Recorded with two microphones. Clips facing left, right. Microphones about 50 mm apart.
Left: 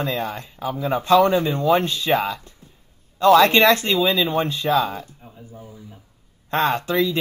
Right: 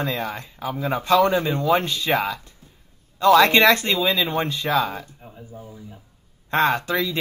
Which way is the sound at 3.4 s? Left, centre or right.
Right.